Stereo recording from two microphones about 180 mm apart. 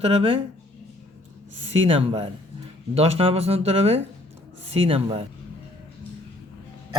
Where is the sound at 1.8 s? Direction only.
30° right (ahead or behind).